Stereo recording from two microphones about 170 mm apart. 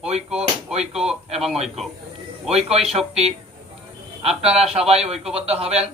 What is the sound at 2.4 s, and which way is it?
Speech, 35° right (ahead or behind).